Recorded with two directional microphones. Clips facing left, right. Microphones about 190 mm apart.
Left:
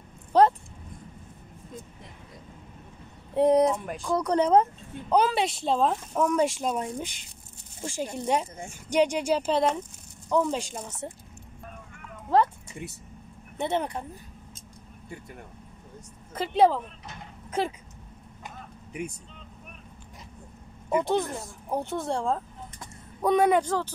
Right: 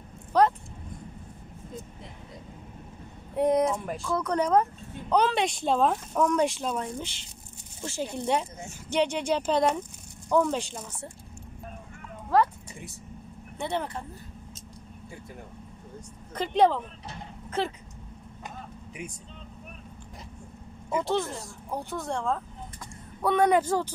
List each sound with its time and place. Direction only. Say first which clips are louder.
0.3 s speech: left 2 dB; 30° left (ahead or behind)
3.3 s speech: left 3 dB; 30° left (ahead or behind)
3.7 s speech: right 1 dB; centre (ahead or behind)
4.0 s speech: left 4 dB; 35° left (ahead or behind)
5.1 s speech: left 1 dB; 5° left (ahead or behind)
13.6 s speech: left 3 dB; 20° left (ahead or behind)
16.3 s speech: left 1 dB; 5° left (ahead or behind)
21.0 s speech: left 2 dB; 15° left (ahead or behind)
23.2 s speech: left 1 dB; 10° left (ahead or behind)
23.5 s speech: even; 10° right (ahead or behind)